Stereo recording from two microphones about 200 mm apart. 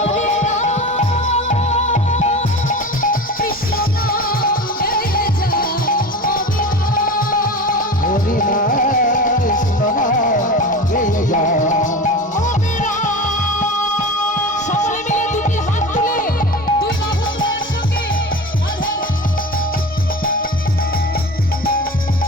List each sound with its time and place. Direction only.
0.0 s music: 35° left (ahead or behind)
14.7 s music: 40° left (ahead or behind)